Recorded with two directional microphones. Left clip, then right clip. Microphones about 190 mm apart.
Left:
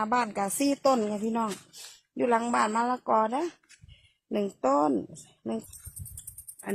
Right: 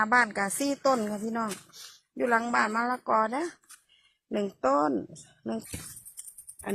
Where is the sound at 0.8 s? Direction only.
30° left (ahead or behind); by 5.6 s 10° left (ahead or behind).